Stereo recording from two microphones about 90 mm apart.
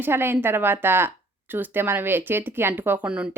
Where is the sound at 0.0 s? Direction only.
25° right (ahead or behind).